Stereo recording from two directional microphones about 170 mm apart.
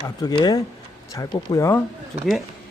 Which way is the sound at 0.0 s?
25° left (ahead or behind).